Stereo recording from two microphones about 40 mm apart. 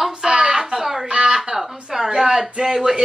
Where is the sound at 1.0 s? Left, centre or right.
Right.